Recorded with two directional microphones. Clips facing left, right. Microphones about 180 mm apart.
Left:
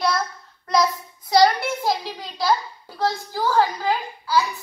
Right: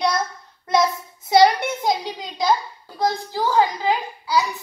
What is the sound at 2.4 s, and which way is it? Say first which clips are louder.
A child's voice: right 1 dB; 15° right (ahead or behind).